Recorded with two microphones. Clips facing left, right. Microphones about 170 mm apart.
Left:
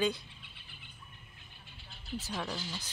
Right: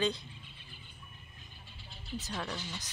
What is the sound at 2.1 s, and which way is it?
Speech, 10° left (ahead or behind).